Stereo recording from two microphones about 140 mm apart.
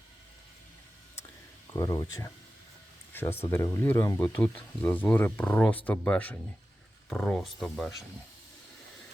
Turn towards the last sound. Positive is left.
turn(degrees=0)  # may be behind; listen again after turning